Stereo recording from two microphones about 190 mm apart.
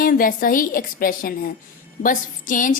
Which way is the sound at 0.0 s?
50° left (ahead or behind).